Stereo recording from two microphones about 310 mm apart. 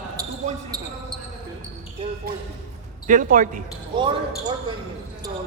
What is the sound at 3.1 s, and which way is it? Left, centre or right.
Speech, right.